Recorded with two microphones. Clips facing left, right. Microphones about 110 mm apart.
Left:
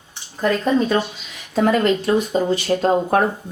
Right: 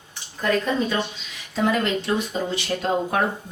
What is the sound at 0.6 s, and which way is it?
A woman's voice, 40° left (ahead or behind).